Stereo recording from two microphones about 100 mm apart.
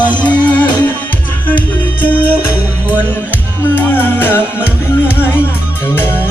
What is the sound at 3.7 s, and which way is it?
Music, 15° left (ahead or behind).